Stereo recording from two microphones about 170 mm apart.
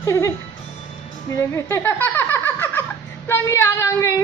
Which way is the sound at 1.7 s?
10° left (ahead or behind).